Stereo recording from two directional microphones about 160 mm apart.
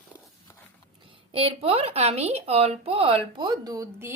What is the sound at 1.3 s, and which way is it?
Speech, 35° right (ahead or behind).